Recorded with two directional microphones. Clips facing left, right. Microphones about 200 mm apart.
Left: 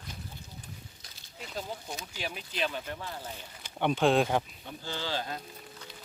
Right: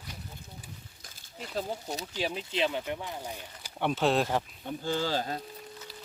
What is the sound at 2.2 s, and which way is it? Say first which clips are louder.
Speech: right 5 dB; 25° right (ahead or behind).